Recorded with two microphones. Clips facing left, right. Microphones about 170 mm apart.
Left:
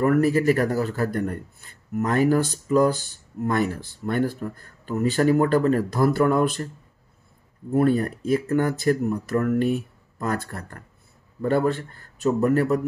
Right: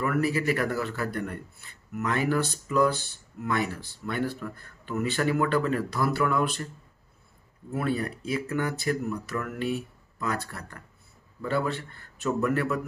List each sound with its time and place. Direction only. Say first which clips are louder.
0.0 s a man's voice: left 7 dB; 45° left (ahead or behind)
7.7 s a man's voice: left 8 dB; 45° left (ahead or behind)